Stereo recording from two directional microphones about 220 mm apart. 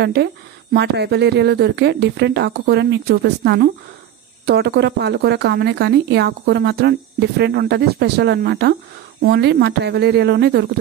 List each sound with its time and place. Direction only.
0.0 s a woman's voice: 50° right (ahead or behind)